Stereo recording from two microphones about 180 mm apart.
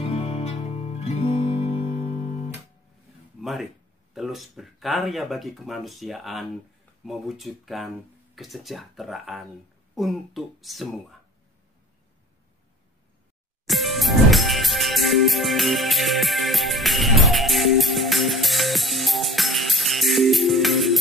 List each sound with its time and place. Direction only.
0.0 s music: 35° left (ahead or behind)
3.4 s a sound: centre (ahead or behind)
4.1 s speech: centre (ahead or behind)
13.7 s music: centre (ahead or behind)